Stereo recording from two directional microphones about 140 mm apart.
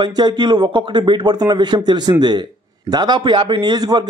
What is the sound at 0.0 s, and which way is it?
A man's voice, 30° right (ahead or behind).